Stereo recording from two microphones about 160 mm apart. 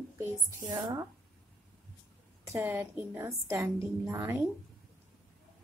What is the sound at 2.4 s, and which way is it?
A woman's voice, 15° right (ahead or behind).